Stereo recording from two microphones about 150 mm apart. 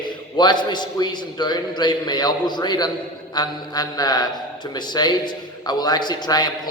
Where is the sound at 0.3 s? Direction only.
30° left (ahead or behind).